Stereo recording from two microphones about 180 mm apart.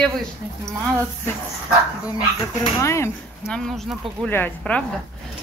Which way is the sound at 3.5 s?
Centre (ahead or behind).